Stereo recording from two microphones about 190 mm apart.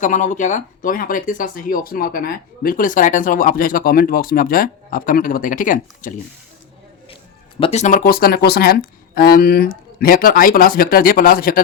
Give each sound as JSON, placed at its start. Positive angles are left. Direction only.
{"t": 0.0, "sound": "speech", "side_deg": 40}
{"t": 7.6, "sound": "speech", "side_deg": 35}